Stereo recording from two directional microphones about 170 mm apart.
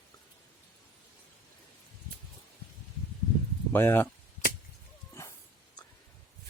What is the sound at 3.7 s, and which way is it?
Speech, 15° left (ahead or behind).